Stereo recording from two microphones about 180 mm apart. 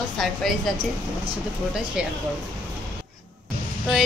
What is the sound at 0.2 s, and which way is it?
Speech, centre (ahead or behind).